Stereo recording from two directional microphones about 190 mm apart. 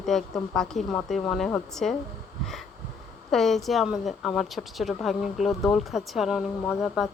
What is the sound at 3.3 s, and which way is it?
A woman's voice, centre (ahead or behind).